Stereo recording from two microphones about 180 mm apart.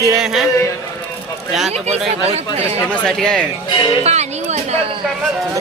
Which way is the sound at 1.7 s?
35° right (ahead or behind).